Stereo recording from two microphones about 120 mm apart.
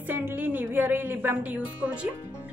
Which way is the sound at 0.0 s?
15° right (ahead or behind).